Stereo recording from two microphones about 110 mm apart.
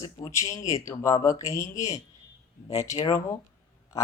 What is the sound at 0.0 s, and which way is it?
Speech, 25° left (ahead or behind).